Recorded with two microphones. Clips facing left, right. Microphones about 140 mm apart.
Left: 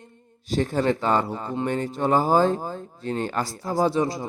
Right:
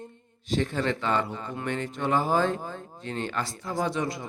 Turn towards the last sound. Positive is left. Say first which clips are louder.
# left 6 dB
turn(degrees=25)  # may be behind; listen again after turning